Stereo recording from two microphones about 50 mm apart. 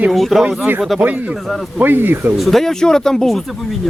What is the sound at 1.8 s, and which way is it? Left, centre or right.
Speech, right.